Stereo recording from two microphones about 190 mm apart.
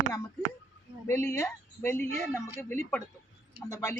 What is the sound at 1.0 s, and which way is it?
A woman's voice, 15° left (ahead or behind).